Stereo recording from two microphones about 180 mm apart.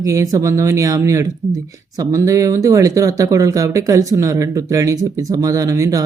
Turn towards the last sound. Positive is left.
turn(degrees=-20)  # may be behind; listen again after turning